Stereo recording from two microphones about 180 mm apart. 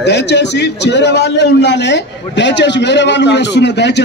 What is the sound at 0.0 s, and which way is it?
A man's voice, 70° left (ahead or behind).